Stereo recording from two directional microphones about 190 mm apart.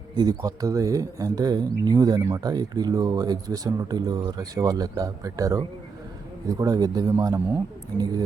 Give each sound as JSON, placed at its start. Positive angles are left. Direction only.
{"t": 0.2, "sound": "speech", "side_deg": -20}